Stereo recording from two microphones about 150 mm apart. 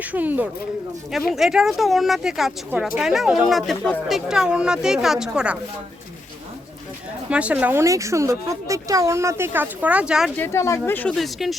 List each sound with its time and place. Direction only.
0.0 s speech: 10° right (ahead or behind)
7.3 s speech: 10° right (ahead or behind)
10.3 s speech: 15° left (ahead or behind); by 11.5 s centre (ahead or behind)